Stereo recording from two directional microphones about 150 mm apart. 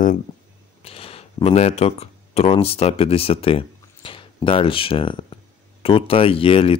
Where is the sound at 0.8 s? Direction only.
40° left (ahead or behind).